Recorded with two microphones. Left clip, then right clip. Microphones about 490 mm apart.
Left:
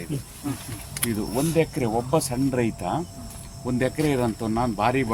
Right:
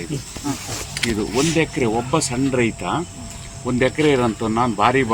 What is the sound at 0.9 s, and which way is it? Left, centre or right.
Speech, left.